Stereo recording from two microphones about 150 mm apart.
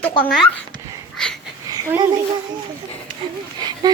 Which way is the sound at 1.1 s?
5° left (ahead or behind).